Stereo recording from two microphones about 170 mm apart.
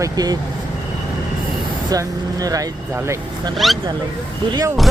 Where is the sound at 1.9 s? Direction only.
20° right (ahead or behind).